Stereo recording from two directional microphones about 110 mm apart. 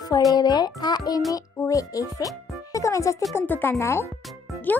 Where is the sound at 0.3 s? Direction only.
40° left (ahead or behind).